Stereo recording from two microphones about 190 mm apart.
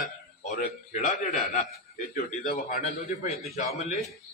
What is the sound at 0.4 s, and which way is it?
A man's voice, 40° left (ahead or behind).